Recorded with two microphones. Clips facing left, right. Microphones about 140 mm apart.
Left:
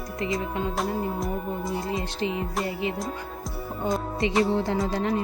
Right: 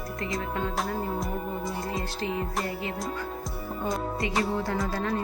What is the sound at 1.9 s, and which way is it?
Speech, 20° left (ahead or behind).